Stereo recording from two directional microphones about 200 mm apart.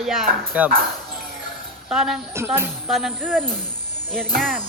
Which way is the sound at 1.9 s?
Centre (ahead or behind).